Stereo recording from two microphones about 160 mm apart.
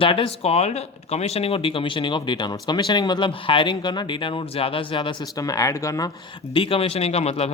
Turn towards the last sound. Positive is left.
turn(degrees=40)  # may be behind; listen again after turning